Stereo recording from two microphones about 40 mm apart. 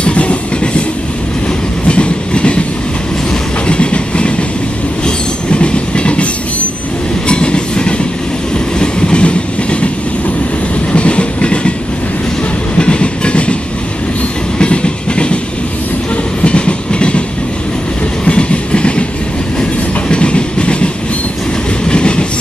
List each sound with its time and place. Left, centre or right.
0.0 s train: left
1.9 s train: left
3.6 s train: left
7.2 s train: left
10.9 s train: left
12.7 s train: left
14.6 s train: left
16.4 s train: left
18.2 s train: left
20.1 s train: left